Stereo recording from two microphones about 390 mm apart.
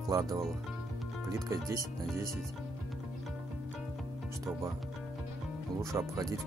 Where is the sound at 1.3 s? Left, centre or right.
Centre.